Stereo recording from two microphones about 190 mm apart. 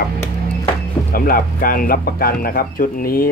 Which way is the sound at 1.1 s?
50° left (ahead or behind).